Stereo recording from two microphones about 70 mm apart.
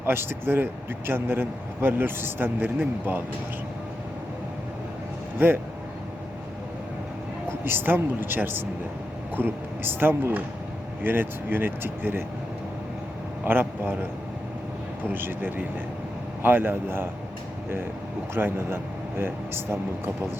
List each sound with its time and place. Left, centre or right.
0.0 s a man's voice: right
7.6 s a man's voice: right
13.4 s speech: right
15.1 s speech: right
18.3 s a man's voice: right